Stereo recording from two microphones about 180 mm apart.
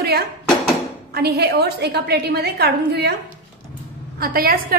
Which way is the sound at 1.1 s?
60° right (ahead or behind).